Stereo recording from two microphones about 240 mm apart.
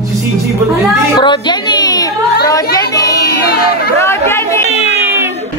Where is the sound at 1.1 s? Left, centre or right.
Centre.